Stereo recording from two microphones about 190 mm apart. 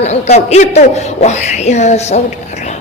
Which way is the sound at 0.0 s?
35° left (ahead or behind).